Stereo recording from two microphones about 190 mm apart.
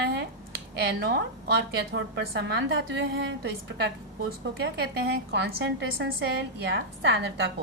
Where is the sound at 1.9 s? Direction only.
70° right (ahead or behind).